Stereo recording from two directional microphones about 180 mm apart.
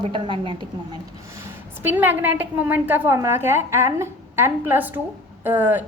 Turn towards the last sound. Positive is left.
turn(degrees=-10)  # may be behind; listen again after turning